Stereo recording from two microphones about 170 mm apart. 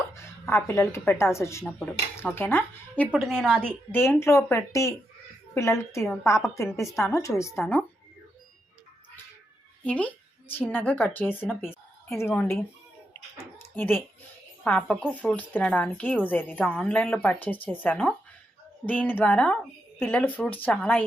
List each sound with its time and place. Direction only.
0.1 s a woman's voice: 15° left (ahead or behind)
9.8 s a woman's voice: 10° left (ahead or behind)
13.4 s a sound: 15° left (ahead or behind)
14.6 s a woman's voice: 5° left (ahead or behind)